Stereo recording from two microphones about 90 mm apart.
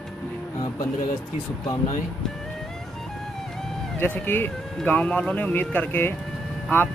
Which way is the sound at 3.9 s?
25° left (ahead or behind).